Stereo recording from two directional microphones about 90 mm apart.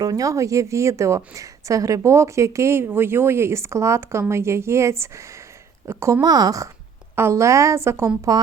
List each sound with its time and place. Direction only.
0.0 s a woman's voice: 45° right (ahead or behind)
6.2 s speech: 45° right (ahead or behind)
7.2 s speech: 30° right (ahead or behind)